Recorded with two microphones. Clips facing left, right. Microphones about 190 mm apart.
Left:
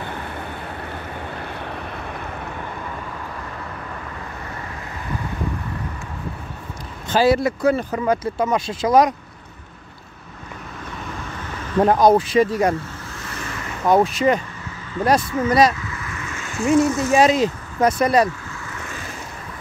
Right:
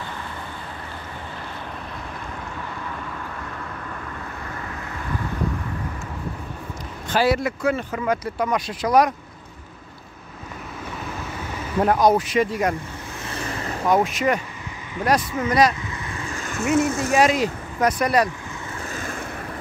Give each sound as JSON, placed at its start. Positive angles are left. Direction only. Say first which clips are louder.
{"t": 7.1, "sound": "speech", "louder": "left 4 dB", "side_deg": 30}
{"t": 11.8, "sound": "speech", "louder": "left 3 dB", "side_deg": 30}
{"t": 13.8, "sound": "speech", "louder": "left 4 dB", "side_deg": 30}
{"t": 16.0, "sound": "vehicle", "louder": "right 1 dB", "side_deg": -30}
{"t": 16.6, "sound": "speech", "louder": "left 4 dB", "side_deg": 30}
{"t": 18.9, "sound": "vehicle", "louder": "right 3 dB", "side_deg": -45}